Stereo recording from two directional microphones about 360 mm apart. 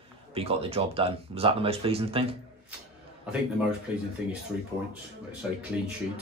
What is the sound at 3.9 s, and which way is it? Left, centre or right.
Speech, centre.